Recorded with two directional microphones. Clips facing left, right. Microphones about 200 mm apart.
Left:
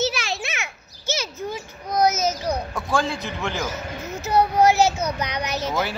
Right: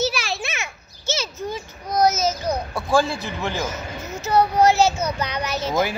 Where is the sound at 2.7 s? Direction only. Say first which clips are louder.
Right 4 dB; 10° right (ahead or behind).